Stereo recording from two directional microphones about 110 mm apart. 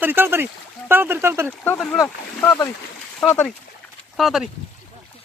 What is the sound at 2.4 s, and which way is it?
Speech, 30° left (ahead or behind).